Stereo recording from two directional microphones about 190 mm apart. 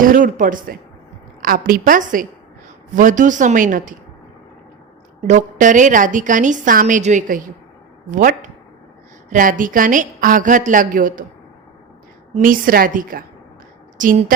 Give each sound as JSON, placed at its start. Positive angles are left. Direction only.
{"t": 0.0, "sound": "a woman's voice", "side_deg": -45}
{"t": 5.2, "sound": "a woman's voice", "side_deg": -40}
{"t": 12.3, "sound": "a woman's voice", "side_deg": -45}